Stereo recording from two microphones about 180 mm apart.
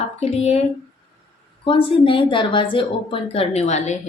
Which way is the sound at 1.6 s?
30° left (ahead or behind).